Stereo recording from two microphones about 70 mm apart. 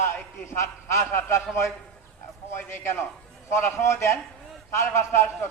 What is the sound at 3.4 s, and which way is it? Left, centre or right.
A man's voice, left.